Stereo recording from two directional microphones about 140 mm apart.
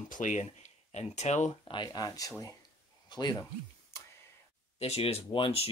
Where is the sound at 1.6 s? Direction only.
30° left (ahead or behind).